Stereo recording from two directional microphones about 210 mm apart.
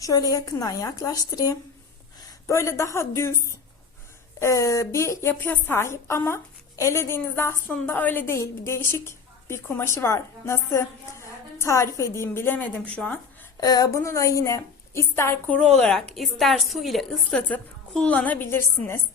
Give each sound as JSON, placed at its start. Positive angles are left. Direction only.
{"t": 0.0, "sound": "a woman's voice", "side_deg": 15}
{"t": 13.6, "sound": "a woman's voice", "side_deg": 20}